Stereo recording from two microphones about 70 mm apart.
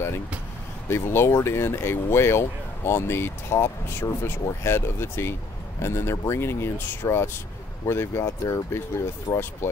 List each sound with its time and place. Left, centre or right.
0.8 s speech: left